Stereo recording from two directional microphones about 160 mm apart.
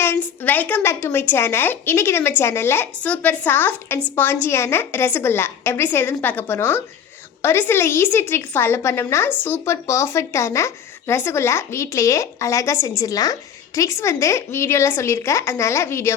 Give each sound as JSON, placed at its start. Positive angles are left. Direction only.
{"t": 0.0, "sound": "a woman's voice", "side_deg": 15}